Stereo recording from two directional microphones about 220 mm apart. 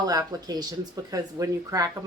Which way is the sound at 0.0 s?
15° right (ahead or behind).